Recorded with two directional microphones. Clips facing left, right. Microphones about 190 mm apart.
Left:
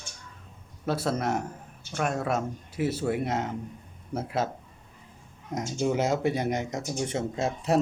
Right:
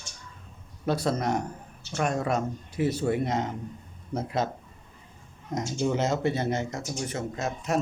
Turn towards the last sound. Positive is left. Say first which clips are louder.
# left 3 dB
turn(degrees=30)  # may be behind; listen again after turning